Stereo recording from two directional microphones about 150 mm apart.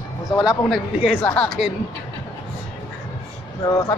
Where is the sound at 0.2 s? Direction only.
20° left (ahead or behind).